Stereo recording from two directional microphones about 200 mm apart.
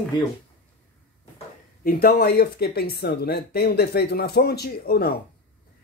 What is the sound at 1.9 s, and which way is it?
Speech, 50° left (ahead or behind).